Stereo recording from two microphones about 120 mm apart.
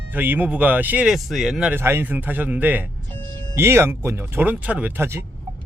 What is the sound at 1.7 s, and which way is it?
Speech, 20° right (ahead or behind).